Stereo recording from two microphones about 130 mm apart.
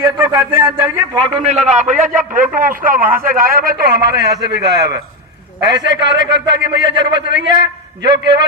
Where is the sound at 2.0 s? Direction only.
90° right.